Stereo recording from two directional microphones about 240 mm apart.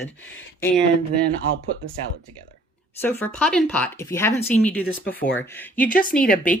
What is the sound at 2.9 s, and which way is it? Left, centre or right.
Speech, centre.